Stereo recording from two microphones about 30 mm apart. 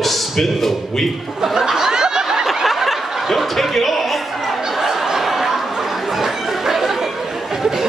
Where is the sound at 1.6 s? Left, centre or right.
Centre.